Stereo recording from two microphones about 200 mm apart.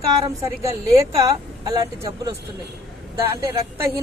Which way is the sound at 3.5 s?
15° right (ahead or behind).